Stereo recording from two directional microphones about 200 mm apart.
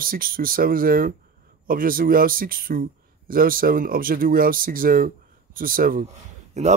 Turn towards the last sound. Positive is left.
turn(degrees=-35)  # may be behind; listen again after turning